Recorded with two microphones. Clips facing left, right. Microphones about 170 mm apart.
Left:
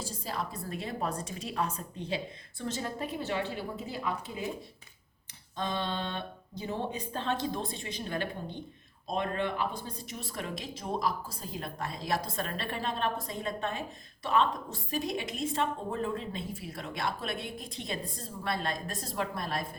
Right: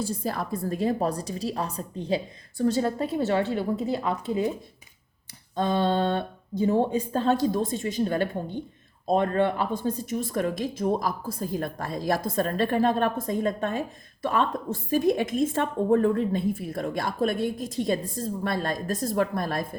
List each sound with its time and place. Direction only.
0.0 s a woman's voice: 55° right (ahead or behind)
5.5 s a woman's voice: 45° right (ahead or behind)